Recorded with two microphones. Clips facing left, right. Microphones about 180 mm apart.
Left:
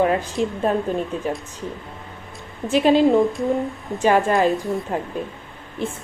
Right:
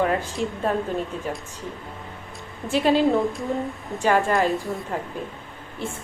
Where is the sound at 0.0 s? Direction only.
20° left (ahead or behind).